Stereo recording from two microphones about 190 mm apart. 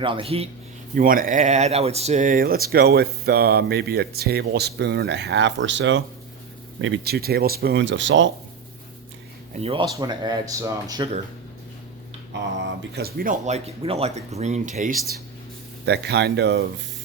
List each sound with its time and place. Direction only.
0.0 s speech: 25° right (ahead or behind)
0.9 s speech: 45° right (ahead or behind); by 8.3 s 80° right
9.5 s speech: 30° right (ahead or behind)
12.9 s speech: 55° right (ahead or behind)
15.9 s speech: 60° right (ahead or behind)